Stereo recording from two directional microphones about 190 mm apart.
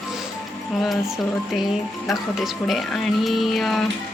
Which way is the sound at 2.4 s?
Centre (ahead or behind).